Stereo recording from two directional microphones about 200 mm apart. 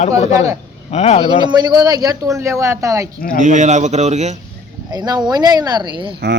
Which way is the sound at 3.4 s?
40° right (ahead or behind).